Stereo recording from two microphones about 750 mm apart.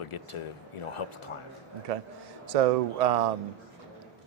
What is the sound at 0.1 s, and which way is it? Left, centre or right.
Speech, left.